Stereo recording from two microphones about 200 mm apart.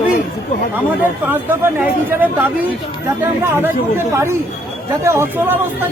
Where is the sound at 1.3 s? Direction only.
10° right (ahead or behind).